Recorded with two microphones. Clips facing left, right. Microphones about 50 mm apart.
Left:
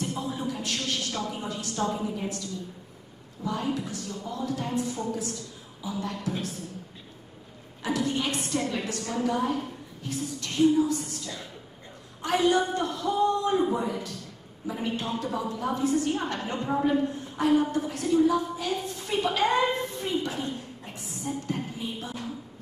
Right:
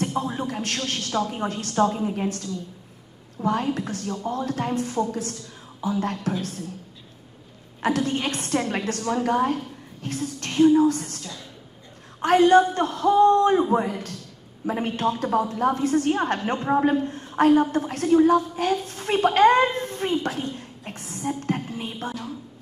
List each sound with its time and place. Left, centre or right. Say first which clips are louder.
0.1 s a woman's voice: right 5 dB; right
7.8 s a woman's voice: right 4 dB; right
16.4 s a woman's voice: right 6 dB; right
17.1 s a woman's voice: right 6 dB; right
18.9 s a sound: right 6 dB; right
20.5 s music: right 2 dB; right